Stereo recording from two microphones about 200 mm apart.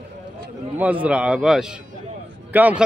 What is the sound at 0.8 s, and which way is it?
Speech, 10° right (ahead or behind).